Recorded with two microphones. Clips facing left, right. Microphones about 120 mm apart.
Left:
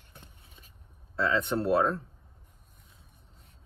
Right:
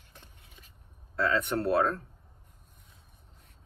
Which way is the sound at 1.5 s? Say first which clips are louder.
Left 1 dB; 5° left (ahead or behind).